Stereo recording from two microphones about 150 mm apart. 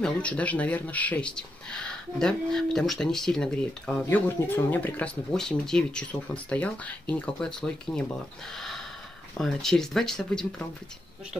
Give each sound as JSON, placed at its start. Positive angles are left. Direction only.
{"t": 0.0, "sound": "speech", "side_deg": 10}
{"t": 9.4, "sound": "speech", "side_deg": 5}